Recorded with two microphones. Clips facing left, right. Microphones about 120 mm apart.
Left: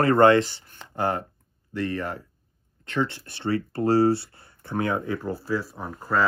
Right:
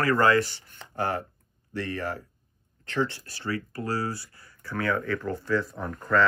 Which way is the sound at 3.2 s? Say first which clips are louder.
Left 6 dB; 25° left (ahead or behind).